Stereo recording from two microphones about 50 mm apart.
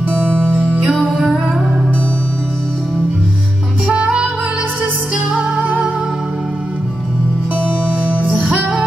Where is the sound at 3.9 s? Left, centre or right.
Centre.